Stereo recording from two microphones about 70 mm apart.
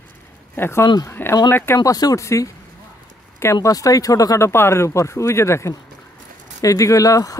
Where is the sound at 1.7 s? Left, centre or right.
Left.